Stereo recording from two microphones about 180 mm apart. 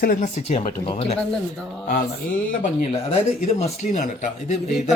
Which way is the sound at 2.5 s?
45° left (ahead or behind).